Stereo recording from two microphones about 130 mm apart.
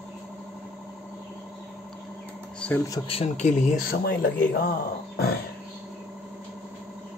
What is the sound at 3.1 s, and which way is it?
Speech, 55° left (ahead or behind).